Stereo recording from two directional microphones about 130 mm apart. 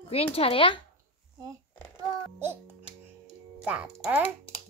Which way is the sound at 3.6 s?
10° right (ahead or behind).